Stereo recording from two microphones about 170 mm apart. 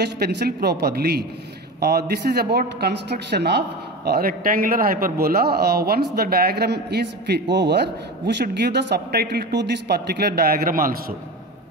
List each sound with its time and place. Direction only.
0.0 s a man's voice: 70° right (ahead or behind)